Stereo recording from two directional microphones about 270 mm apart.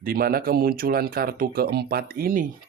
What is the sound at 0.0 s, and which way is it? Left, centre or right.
Speech, right.